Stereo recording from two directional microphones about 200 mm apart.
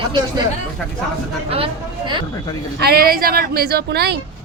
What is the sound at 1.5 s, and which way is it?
Speech, 30° right (ahead or behind).